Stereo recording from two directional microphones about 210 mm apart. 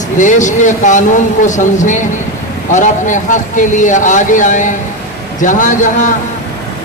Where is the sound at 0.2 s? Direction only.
35° left (ahead or behind).